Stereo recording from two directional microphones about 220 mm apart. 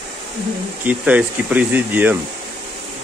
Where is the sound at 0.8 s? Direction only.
5° right (ahead or behind).